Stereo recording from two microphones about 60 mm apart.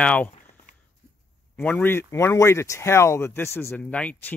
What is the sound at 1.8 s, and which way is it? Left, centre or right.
Speech, left.